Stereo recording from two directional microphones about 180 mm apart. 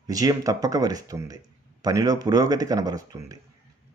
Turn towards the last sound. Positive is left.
turn(degrees=-20)  # may be behind; listen again after turning